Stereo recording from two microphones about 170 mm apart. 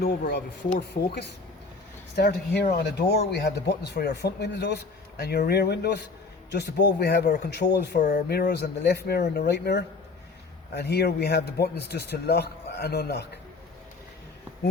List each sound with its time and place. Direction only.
0.0 s speech: 70° left (ahead or behind)